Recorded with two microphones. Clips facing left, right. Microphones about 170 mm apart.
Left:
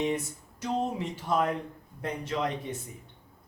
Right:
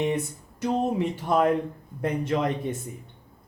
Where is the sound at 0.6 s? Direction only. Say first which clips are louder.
Right 6 dB; 55° right (ahead or behind).